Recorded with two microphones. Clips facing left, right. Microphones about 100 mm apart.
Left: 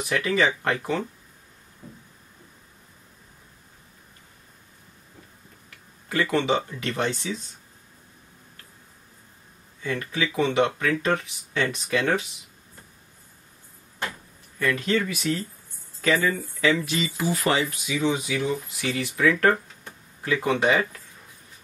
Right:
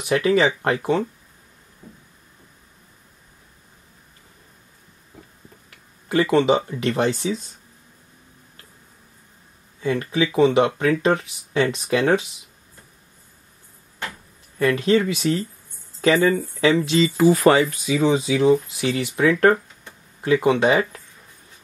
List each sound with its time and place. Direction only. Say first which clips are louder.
0.2 s speech: right 4 dB; 20° right (ahead or behind)
6.0 s speech: right 6 dB; 25° right (ahead or behind)
9.8 s speech: right 6 dB; 25° right (ahead or behind)
14.6 s speech: right 6 dB; 30° right (ahead or behind)
17.2 s speech: right 9 dB; 45° right (ahead or behind); by 20.8 s 20° right (ahead or behind)